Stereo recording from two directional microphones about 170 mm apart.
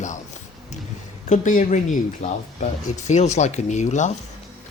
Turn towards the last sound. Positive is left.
turn(degrees=45)  # may be behind; listen again after turning